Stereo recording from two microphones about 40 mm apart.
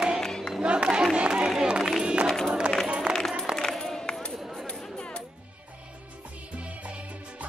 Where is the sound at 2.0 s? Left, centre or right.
Right.